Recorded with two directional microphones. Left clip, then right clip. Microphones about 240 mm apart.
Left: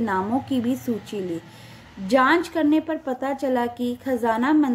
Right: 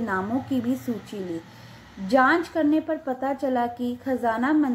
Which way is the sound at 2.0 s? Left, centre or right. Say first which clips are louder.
Left 1 dB; left.